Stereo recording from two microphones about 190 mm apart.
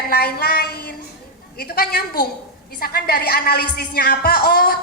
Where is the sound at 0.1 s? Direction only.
55° left (ahead or behind).